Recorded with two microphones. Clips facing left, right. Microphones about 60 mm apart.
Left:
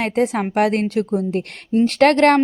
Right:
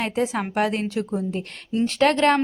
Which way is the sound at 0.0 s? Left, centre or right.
Left.